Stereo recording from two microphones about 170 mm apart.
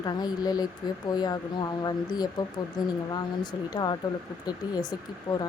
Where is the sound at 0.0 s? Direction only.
25° left (ahead or behind).